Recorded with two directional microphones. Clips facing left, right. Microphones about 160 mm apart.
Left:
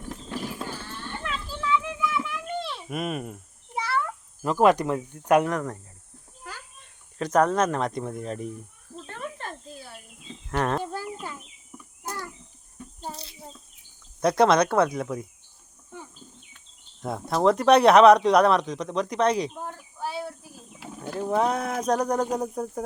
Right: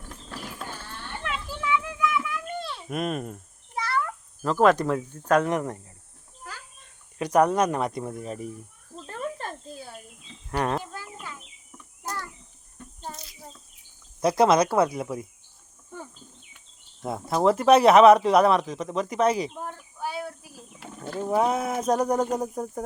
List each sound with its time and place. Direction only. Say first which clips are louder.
1.2 s children playing: right 1 dB; 15° right (ahead or behind)
1.8 s a sound: right 1 dB; 20° left (ahead or behind)
2.9 s speech: right 2 dB; 5° left (ahead or behind)
3.9 s speech: right 1 dB; 15° left (ahead or behind)
5.5 s speech: right 2 dB; 20° right (ahead or behind)
7.2 s speech: right 1 dB; 10° right (ahead or behind)
10.5 s speech: left 1 dB; 10° right (ahead or behind)
10.9 s bird: left 6 dB; 35° left (ahead or behind)
12.8 s a sound: left 3 dB; 5° left (ahead or behind)
14.2 s speech: even; 5° right (ahead or behind)
17.0 s speech: even; 5° right (ahead or behind)
20.7 s wild animals: left 1 dB; 5° left (ahead or behind)
21.2 s speech: right 1 dB; 5° right (ahead or behind)